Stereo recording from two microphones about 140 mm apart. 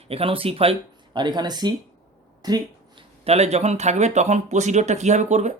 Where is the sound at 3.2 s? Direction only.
50° right (ahead or behind).